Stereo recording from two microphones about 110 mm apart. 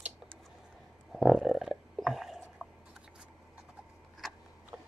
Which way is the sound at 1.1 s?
Centre (ahead or behind).